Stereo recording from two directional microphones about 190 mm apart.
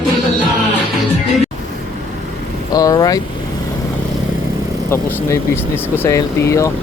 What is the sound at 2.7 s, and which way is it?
Speech, 20° left (ahead or behind).